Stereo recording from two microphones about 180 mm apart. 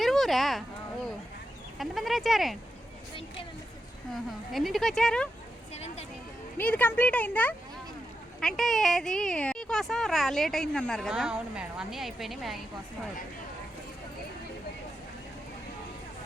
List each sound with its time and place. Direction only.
0.0 s a sound: centre (ahead or behind)
1.8 s speech: centre (ahead or behind)
4.1 s speech: centre (ahead or behind)
5.7 s speech: 35° left (ahead or behind)
6.6 s speech: 10° left (ahead or behind)